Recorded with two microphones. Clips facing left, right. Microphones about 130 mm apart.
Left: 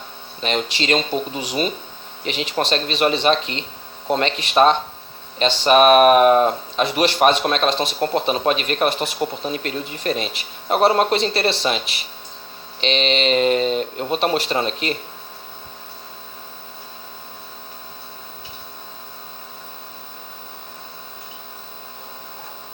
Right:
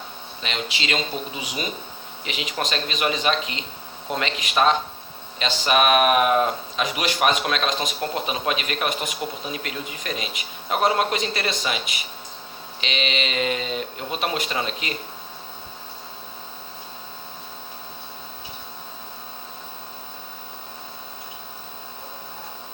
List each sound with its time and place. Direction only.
0.4 s speech: 45° left (ahead or behind)
1.4 s speech: 10° right (ahead or behind)
2.2 s speech: 35° left (ahead or behind)
12.8 s speech: 35° left (ahead or behind)